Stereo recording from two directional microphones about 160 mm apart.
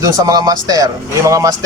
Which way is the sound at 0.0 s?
20° right (ahead or behind).